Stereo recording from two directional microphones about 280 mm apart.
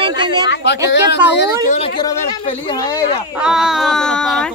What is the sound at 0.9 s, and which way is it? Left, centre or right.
Speech, left.